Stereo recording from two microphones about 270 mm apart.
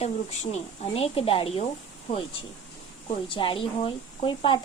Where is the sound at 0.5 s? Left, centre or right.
Left.